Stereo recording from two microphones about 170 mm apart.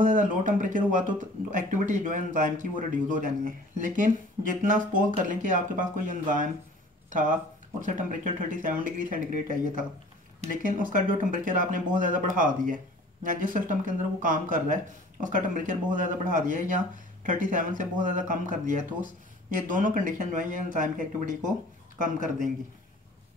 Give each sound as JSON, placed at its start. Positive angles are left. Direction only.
{"t": 0.0, "sound": "speech", "side_deg": -50}
{"t": 10.4, "sound": "speech", "side_deg": -50}